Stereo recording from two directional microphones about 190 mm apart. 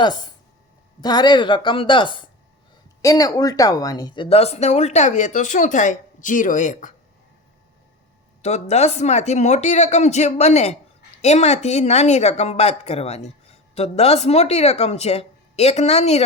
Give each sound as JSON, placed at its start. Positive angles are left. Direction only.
{"t": 0.0, "sound": "a woman's voice", "side_deg": 20}
{"t": 8.4, "sound": "a woman's voice", "side_deg": 35}